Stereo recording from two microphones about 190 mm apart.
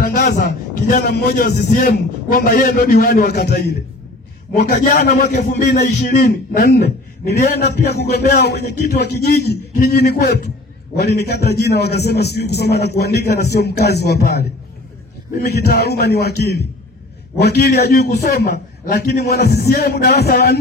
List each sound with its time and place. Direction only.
0.0 s a man's voice: 55° left (ahead or behind)